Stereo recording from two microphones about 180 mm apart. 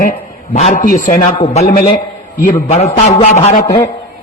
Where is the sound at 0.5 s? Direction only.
40° left (ahead or behind).